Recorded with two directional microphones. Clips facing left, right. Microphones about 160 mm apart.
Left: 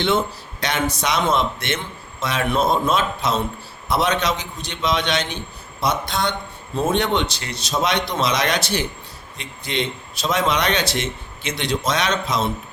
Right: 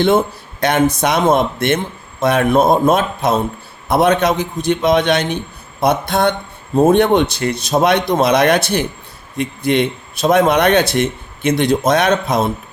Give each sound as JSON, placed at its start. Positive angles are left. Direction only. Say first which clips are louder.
{"t": 0.0, "sound": "speech", "louder": "right 7 dB", "side_deg": -50}